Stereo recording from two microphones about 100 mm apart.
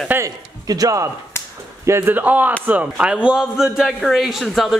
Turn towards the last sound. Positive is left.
turn(degrees=0)  # may be behind; listen again after turning